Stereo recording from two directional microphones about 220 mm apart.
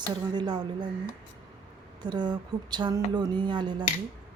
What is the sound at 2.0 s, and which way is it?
A woman's voice, 20° right (ahead or behind).